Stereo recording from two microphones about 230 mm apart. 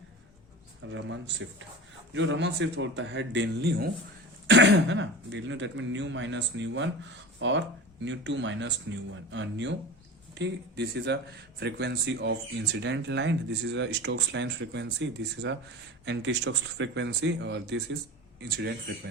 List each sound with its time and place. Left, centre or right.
0.9 s speech: right